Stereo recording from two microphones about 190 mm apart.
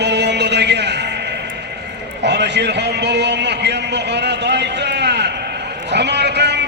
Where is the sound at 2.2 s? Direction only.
65° right (ahead or behind).